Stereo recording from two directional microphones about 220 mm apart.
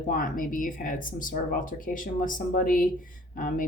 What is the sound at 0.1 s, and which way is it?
Speech, 40° left (ahead or behind).